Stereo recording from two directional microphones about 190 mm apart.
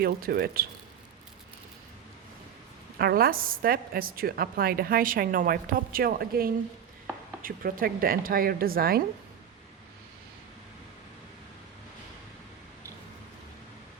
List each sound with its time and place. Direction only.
0.0 s a woman's voice: 55° right (ahead or behind)
3.0 s a woman's voice: 55° right (ahead or behind)